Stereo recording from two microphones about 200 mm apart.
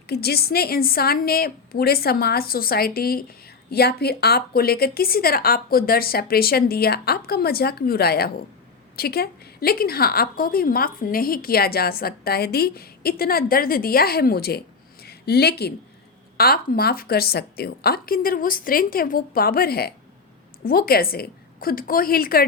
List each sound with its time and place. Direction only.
0.1 s a woman's voice: 50° left (ahead or behind)